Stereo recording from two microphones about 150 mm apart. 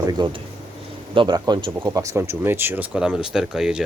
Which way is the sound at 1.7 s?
15° right (ahead or behind).